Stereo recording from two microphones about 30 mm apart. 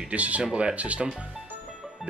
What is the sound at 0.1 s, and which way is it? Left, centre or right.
Speech, right.